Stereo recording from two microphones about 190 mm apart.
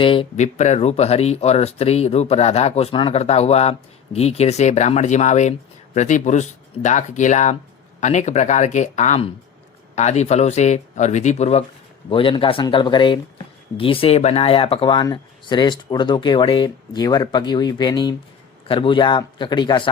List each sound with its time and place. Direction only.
0.0 s speech: 25° left (ahead or behind)